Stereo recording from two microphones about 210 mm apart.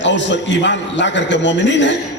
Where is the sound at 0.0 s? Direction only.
60° left (ahead or behind).